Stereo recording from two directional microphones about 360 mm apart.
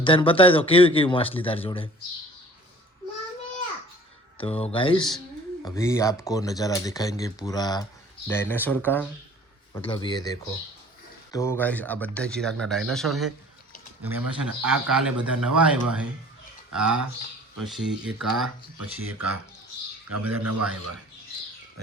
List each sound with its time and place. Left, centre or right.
0.0 s speech: centre
4.4 s speech: centre
18.4 s speech: right
20.3 s speech: right